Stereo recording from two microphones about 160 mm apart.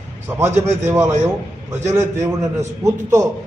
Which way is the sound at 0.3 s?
15° right (ahead or behind).